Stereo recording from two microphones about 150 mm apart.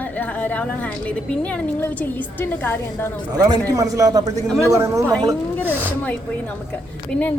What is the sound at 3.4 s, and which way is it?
A man's voice, 20° right (ahead or behind).